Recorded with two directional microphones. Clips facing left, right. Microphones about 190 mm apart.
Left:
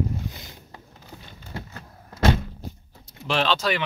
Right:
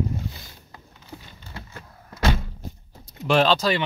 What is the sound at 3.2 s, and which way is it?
Speech, 45° right (ahead or behind).